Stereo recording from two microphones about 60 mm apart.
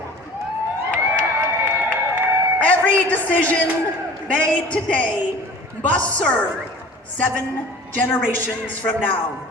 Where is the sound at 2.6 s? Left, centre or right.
Left.